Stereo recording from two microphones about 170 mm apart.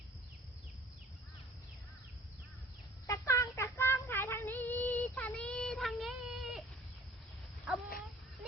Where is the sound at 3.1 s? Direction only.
15° left (ahead or behind); by 6.6 s centre (ahead or behind).